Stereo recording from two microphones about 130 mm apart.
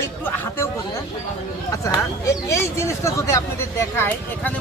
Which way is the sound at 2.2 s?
25° left (ahead or behind).